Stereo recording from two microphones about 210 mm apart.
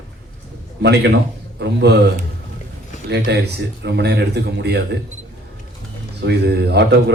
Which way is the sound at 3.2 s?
50° right (ahead or behind).